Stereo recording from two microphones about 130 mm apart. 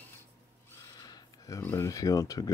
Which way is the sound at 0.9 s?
30° left (ahead or behind).